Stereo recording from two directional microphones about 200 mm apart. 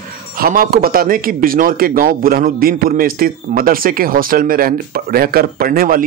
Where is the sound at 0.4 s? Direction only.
45° right (ahead or behind).